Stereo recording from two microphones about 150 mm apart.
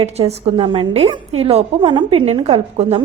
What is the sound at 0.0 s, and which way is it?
A woman's voice, 45° right (ahead or behind).